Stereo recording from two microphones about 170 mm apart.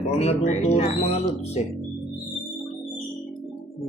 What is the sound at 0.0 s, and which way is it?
Speech, 40° left (ahead or behind).